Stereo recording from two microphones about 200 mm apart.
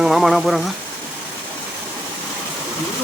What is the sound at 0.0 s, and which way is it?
Speech, centre (ahead or behind).